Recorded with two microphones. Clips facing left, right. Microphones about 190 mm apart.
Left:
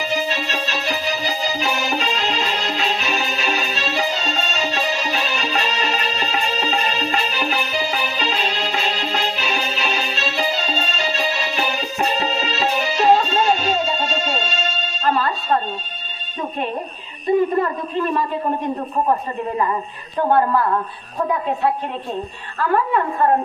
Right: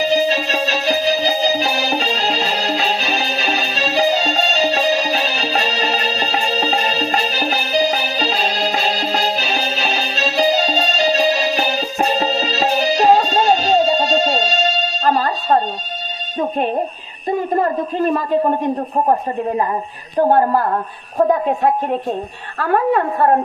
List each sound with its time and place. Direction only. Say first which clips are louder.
0.0 s music: right 7 dB; 35° right (ahead or behind)
17.6 s a sound: right 4 dB; 40° right (ahead or behind)
20.1 s a woman's voice: right 3 dB; 40° right (ahead or behind)